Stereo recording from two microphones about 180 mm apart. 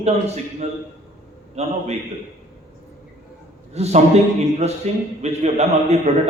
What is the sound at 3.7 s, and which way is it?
A man's voice, 35° right (ahead or behind).